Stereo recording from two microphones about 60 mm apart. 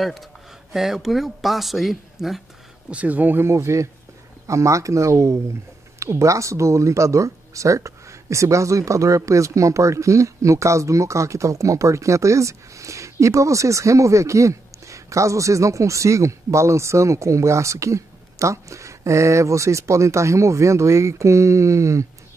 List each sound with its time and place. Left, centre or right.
0.0 s speech: centre
2.9 s speech: right
3.3 s speech: right